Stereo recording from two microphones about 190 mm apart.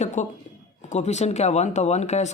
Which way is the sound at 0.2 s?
40° left (ahead or behind).